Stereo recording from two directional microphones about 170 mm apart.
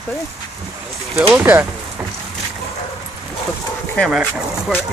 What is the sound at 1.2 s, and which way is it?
Speech, 10° right (ahead or behind).